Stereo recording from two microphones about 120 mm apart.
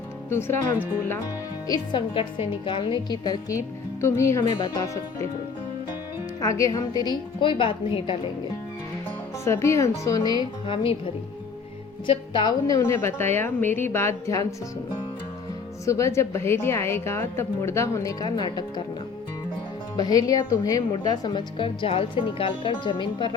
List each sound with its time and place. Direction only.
0.3 s a woman's voice: 20° left (ahead or behind)
1.6 s a woman's voice: 35° left (ahead or behind)
4.0 s a woman's voice: 25° left (ahead or behind)
6.4 s a woman's voice: 25° left (ahead or behind); by 8.1 s 45° left (ahead or behind)
9.4 s a woman's voice: 20° left (ahead or behind)
12.0 s a woman's voice: 40° left (ahead or behind); by 14.4 s 25° left (ahead or behind)
15.9 s a woman's voice: 25° left (ahead or behind)
20.0 s a woman's voice: 30° left (ahead or behind)